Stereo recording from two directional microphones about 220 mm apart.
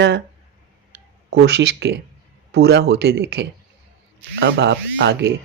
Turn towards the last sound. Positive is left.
turn(degrees=-50)  # may be behind; listen again after turning